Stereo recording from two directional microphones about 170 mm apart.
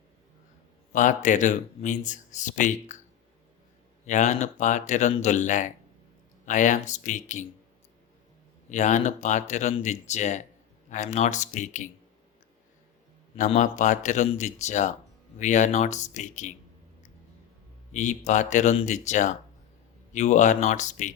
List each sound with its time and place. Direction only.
0.9 s speech: 50° left (ahead or behind)
4.0 s speech: 45° left (ahead or behind)
8.7 s speech: 45° left (ahead or behind)
13.3 s speech: 45° left (ahead or behind)
17.9 s speech: 45° left (ahead or behind)